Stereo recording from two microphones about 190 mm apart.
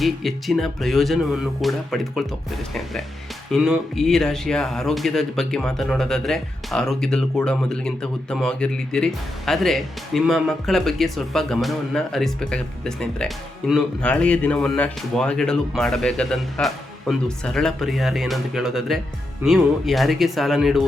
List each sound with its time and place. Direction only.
0.0 s speech: centre (ahead or behind)
3.5 s speech: centre (ahead or behind)